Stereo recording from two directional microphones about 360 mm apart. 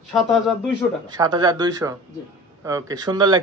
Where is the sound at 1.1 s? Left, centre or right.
Centre.